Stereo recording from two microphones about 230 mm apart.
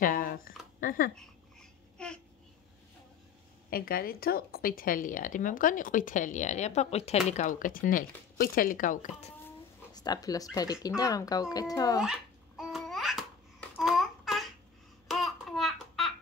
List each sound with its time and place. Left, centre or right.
0.0 s a sound: left
1.1 s babbling: centre
3.7 s speech: left
9.9 s speech: centre
12.0 s babbling: centre
13.7 s a sound: centre
15.0 s babbling: centre